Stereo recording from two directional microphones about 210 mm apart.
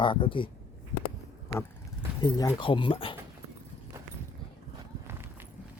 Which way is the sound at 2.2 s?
20° left (ahead or behind).